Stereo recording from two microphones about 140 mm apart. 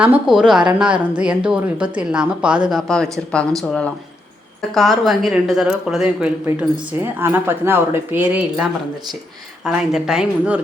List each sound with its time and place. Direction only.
0.0 s a woman's voice: 5° right (ahead or behind)